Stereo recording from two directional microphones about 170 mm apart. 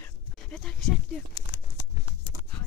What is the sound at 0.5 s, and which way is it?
Speech, 5° left (ahead or behind).